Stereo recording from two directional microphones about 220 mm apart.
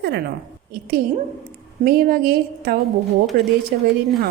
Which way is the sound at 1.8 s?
40° right (ahead or behind).